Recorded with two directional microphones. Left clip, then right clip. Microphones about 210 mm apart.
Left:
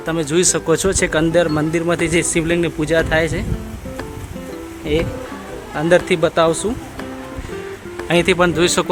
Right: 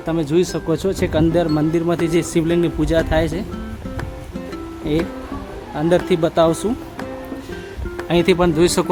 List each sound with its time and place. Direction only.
0.0 s speech: 5° right (ahead or behind)
5.7 s speech: 5° right (ahead or behind)
8.0 s speech: 5° right (ahead or behind)